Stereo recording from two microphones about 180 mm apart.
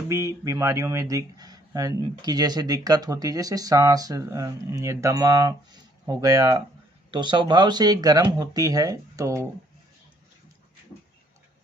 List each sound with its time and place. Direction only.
0.1 s speech: 15° right (ahead or behind)